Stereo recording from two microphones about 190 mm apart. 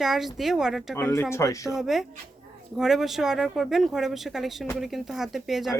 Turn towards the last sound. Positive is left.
turn(degrees=0)  # may be behind; listen again after turning